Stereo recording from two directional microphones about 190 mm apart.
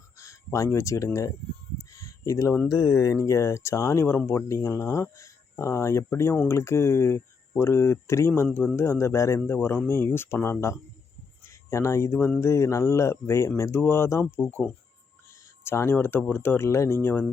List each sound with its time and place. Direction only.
0.2 s speech: 15° left (ahead or behind)
1.9 s a sound: 15° left (ahead or behind)
2.7 s speech: 15° left (ahead or behind)